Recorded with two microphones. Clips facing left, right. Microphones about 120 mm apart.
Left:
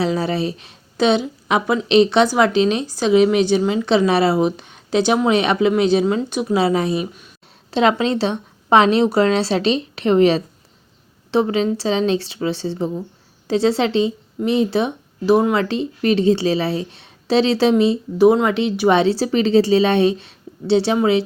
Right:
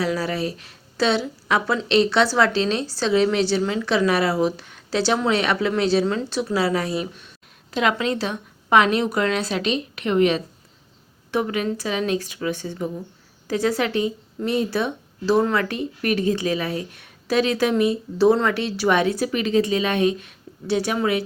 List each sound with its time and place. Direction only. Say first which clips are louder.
0.0 s a woman's voice: left 4 dB; 25° left (ahead or behind)